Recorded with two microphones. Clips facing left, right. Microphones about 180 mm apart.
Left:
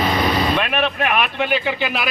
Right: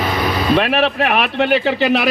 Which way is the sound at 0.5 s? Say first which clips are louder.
Right 5 dB; 65° right (ahead or behind).